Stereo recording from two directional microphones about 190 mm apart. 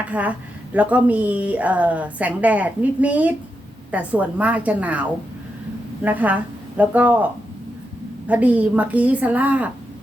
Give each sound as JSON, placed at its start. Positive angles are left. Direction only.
{"t": 0.1, "sound": "speech", "side_deg": -10}
{"t": 8.3, "sound": "speech", "side_deg": -5}